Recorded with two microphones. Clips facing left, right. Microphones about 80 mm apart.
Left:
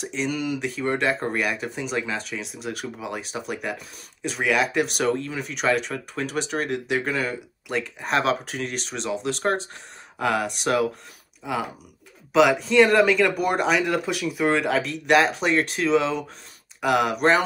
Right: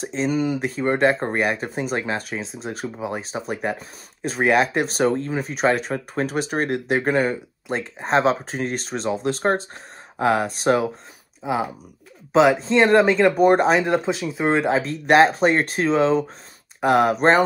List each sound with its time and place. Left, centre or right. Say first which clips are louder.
0.0 s speech: right 5 dB; right